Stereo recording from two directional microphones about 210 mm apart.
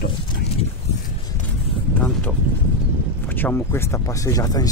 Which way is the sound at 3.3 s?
10° left (ahead or behind).